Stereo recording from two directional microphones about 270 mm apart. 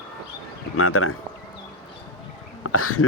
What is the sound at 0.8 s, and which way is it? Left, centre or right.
Speech, left.